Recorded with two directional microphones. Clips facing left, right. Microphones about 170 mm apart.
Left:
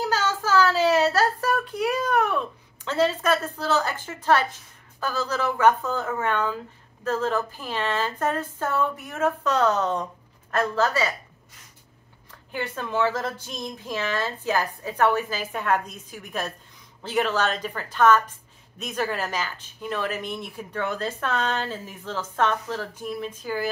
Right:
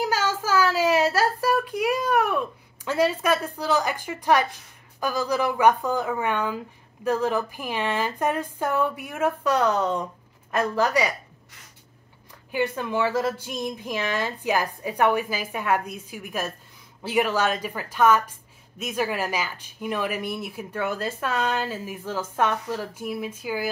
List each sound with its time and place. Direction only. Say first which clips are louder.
0.0 s a sound: even; 10° right (ahead or behind)
5.0 s speech: right 2 dB; 15° right (ahead or behind)
12.4 s speech: right 5 dB; 10° right (ahead or behind)